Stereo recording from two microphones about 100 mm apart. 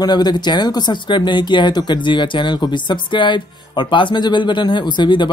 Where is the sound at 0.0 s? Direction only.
45° left (ahead or behind).